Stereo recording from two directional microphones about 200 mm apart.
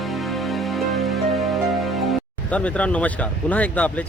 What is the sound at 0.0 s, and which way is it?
Music, centre (ahead or behind).